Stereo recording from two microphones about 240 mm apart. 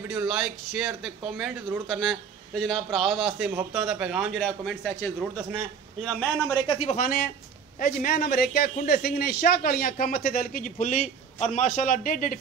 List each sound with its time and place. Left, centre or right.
0.1 s a man's voice: centre
6.0 s a man's voice: centre
6.7 s a man's voice: left